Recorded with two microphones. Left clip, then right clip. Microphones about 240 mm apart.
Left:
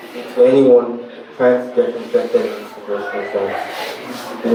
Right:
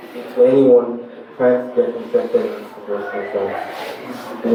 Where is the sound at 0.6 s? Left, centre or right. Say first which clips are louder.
Even; right.